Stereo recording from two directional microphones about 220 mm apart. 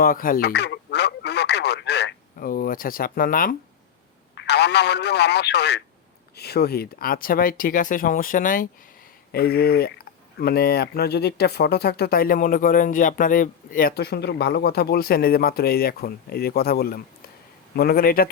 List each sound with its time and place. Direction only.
0.0 s radio: 40° left (ahead or behind)
4.4 s speech: 50° left (ahead or behind)